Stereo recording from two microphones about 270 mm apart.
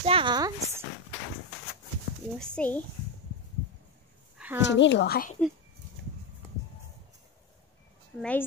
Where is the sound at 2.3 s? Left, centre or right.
Centre.